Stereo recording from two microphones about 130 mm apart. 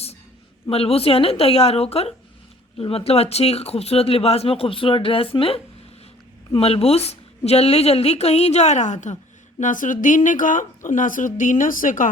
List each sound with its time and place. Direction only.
0.7 s speech: 50° left (ahead or behind)
6.6 s speech: 50° left (ahead or behind); by 9.1 s 65° left (ahead or behind)
9.6 s speech: 80° left